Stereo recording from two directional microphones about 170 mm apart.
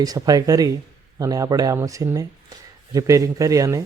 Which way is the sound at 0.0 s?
20° right (ahead or behind).